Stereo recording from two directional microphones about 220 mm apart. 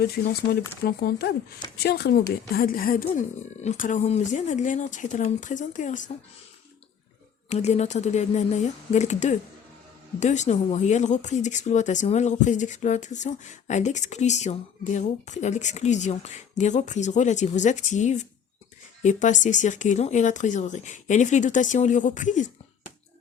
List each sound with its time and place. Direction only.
0.9 s speech: 45° left (ahead or behind)
7.5 s speech: 30° left (ahead or behind)